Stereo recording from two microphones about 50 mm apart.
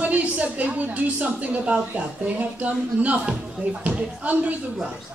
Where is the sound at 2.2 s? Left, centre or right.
Right.